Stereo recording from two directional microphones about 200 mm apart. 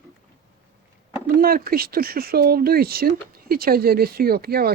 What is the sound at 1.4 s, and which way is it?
Speech, 45° right (ahead or behind).